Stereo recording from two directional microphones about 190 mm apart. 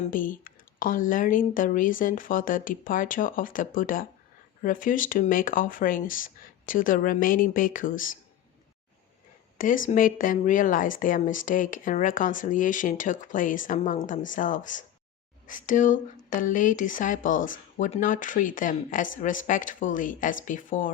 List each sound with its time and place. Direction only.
0.1 s speech: 45° left (ahead or behind)
9.6 s speech: 45° left (ahead or behind)